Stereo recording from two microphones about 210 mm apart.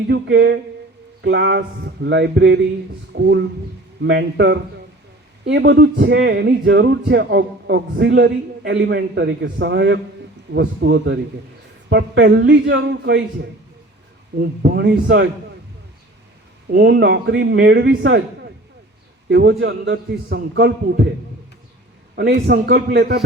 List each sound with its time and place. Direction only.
0.1 s speech: 55° right (ahead or behind)
14.3 s a man's voice: 50° right (ahead or behind)
16.7 s a man's voice: 50° right (ahead or behind)
22.4 s a man's voice: 50° right (ahead or behind)